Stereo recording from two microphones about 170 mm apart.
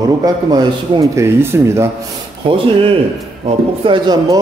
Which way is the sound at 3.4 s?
30° right (ahead or behind).